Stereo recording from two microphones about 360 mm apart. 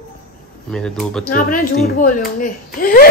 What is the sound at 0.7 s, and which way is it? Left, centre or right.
Speech, centre.